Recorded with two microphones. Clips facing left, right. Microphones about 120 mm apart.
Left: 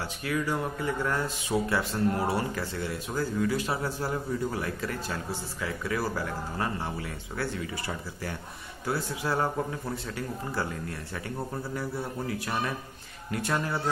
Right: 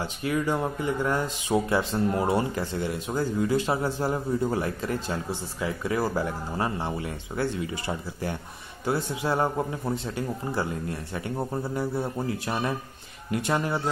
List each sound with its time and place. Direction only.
0.0 s speech: 25° right (ahead or behind)
13.3 s speech: 20° right (ahead or behind)